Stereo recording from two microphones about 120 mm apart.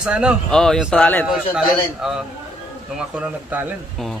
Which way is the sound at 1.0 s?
15° left (ahead or behind).